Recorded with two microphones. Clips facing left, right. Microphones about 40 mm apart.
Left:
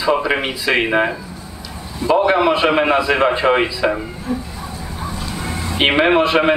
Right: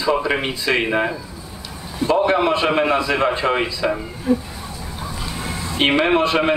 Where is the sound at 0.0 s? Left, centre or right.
Centre.